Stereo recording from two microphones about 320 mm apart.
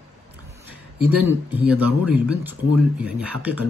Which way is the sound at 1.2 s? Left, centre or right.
Centre.